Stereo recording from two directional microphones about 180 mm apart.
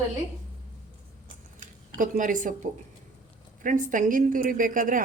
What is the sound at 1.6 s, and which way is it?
A woman's voice, 50° right (ahead or behind).